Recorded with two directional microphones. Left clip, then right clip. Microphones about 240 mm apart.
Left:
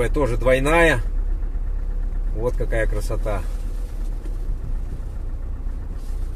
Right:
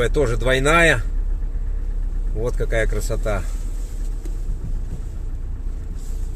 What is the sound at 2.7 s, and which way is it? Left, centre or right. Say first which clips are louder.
Speech: right 2 dB; centre.